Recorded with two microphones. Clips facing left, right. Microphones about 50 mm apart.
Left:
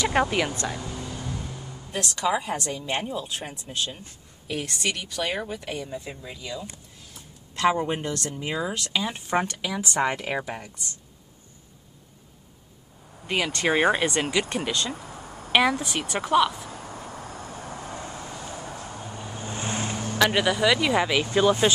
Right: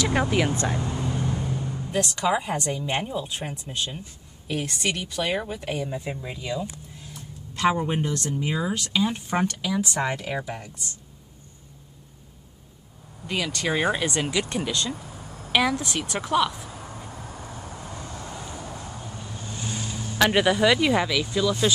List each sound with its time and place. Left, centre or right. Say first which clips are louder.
0.0 s speech: even; centre
0.5 s vehicle: right 4 dB; right
1.9 s speech: right 1 dB; centre
7.2 s a sound: even; centre
8.4 s speech: right 2 dB; centre
13.3 s speech: left 2 dB; left; by 16.5 s centre
17.2 s vehicle: left 1 dB; left
17.8 s vehicle: left 1 dB; left
20.2 s speech: right 2 dB; centre
21.2 s speech: left 4 dB; left